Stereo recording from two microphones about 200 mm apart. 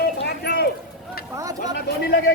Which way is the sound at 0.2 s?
55° left (ahead or behind).